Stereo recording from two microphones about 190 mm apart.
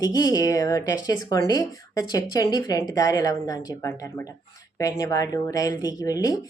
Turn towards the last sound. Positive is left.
turn(degrees=20)  # may be behind; listen again after turning